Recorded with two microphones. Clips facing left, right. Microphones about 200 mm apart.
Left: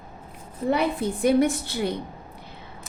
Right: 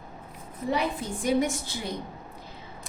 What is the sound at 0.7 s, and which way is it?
A woman's voice, 60° left (ahead or behind).